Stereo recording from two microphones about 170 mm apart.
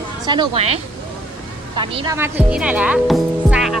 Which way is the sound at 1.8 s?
20° right (ahead or behind).